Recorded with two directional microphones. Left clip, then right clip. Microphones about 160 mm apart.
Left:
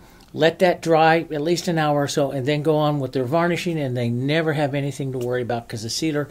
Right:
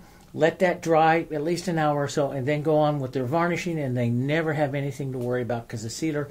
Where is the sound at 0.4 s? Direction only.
35° left (ahead or behind).